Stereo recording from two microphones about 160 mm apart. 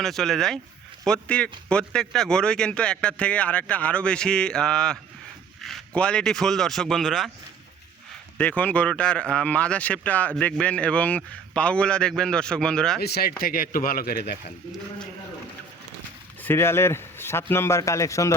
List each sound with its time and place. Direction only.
0.0 s a man's voice: centre (ahead or behind)
8.4 s speech: 10° left (ahead or behind)
13.0 s speech: 85° left
13.4 s speech: 60° left (ahead or behind)
16.4 s speech: 15° left (ahead or behind)